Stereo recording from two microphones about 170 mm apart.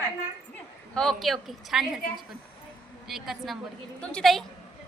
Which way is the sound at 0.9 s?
Centre (ahead or behind).